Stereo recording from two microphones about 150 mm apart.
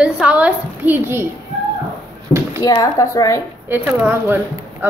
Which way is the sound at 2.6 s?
25° left (ahead or behind).